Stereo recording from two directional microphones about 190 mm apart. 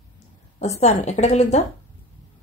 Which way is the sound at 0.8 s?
35° left (ahead or behind).